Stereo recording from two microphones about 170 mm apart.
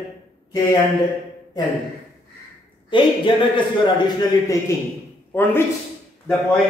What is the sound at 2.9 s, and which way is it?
Speech, 30° left (ahead or behind).